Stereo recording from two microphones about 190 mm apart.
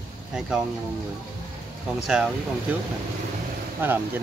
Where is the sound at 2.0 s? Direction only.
5° right (ahead or behind).